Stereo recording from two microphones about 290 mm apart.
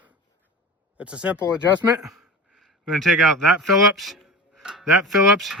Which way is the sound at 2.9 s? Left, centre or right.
Centre.